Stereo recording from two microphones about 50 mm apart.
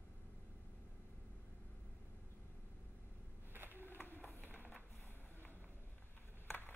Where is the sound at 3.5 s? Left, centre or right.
Right.